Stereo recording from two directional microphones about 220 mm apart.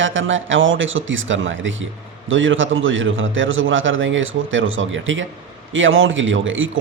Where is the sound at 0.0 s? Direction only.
60° right (ahead or behind).